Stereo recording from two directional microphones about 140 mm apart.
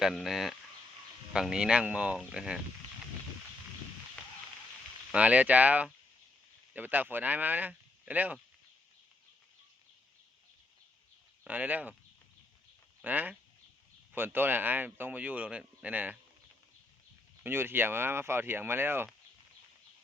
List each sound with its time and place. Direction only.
0.0 s speech: centre (ahead or behind)
5.1 s speech: 10° right (ahead or behind)
11.4 s speech: 10° right (ahead or behind)
13.0 s speech: 10° right (ahead or behind)
17.4 s speech: 15° right (ahead or behind)